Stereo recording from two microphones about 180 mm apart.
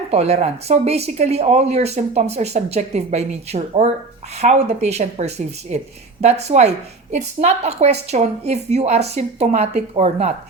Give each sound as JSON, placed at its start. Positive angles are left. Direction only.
{"t": 0.1, "sound": "a woman's voice", "side_deg": -35}